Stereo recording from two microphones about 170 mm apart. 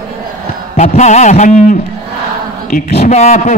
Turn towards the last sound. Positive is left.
turn(degrees=40)  # may be behind; listen again after turning